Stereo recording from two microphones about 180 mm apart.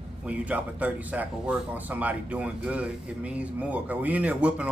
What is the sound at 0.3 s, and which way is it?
A man's voice, 10° right (ahead or behind).